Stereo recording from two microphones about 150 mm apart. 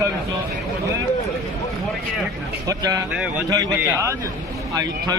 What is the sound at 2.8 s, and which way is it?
Speech, 25° right (ahead or behind).